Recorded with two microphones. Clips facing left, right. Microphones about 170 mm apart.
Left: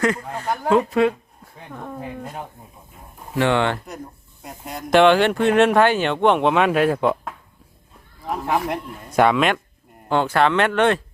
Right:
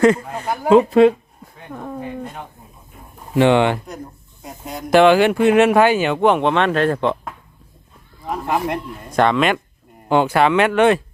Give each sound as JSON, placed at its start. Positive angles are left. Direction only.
{"t": 0.0, "sound": "speech", "side_deg": -25}
{"t": 0.4, "sound": "speech", "side_deg": -10}
{"t": 0.7, "sound": "speech", "side_deg": -25}
{"t": 1.7, "sound": "speech", "side_deg": -5}
{"t": 3.3, "sound": "speech", "side_deg": -20}
{"t": 4.4, "sound": "speech", "side_deg": 0}
{"t": 10.1, "sound": "speech", "side_deg": -15}